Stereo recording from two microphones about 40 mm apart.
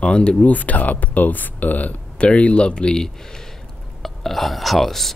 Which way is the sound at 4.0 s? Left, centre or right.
Centre.